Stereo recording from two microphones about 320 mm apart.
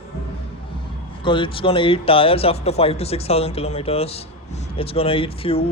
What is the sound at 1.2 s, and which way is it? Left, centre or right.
A man's voice, centre.